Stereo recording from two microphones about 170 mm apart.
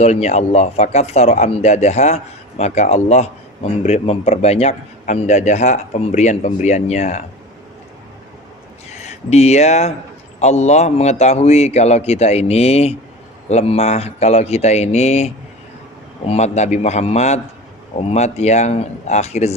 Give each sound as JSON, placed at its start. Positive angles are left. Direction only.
{"t": 0.0, "sound": "speech", "side_deg": 40}
{"t": 8.9, "sound": "speech", "side_deg": 40}